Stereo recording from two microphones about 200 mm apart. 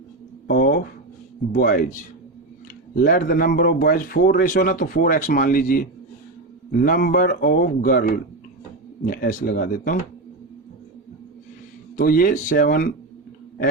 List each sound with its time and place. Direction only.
0.4 s a sound: 50° left (ahead or behind)
1.5 s a man's voice: 45° left (ahead or behind)
3.0 s a man's voice: 50° left (ahead or behind)
11.9 s a man's voice: 45° left (ahead or behind)